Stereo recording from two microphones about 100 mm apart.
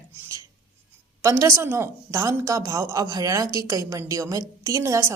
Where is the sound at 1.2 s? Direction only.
30° right (ahead or behind).